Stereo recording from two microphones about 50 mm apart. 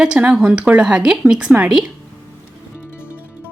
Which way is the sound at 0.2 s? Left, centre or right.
Right.